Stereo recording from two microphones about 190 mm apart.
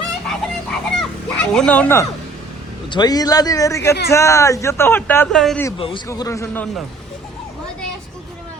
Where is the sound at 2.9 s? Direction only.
20° left (ahead or behind); by 5.6 s 5° left (ahead or behind).